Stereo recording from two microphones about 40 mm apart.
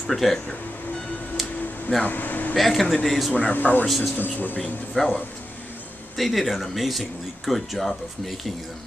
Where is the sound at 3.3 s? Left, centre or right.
Left.